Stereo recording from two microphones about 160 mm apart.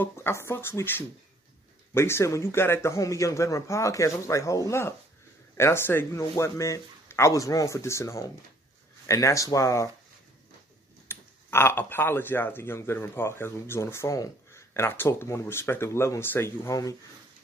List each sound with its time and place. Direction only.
0.0 s speech: 15° left (ahead or behind)
11.1 s speech: 15° left (ahead or behind)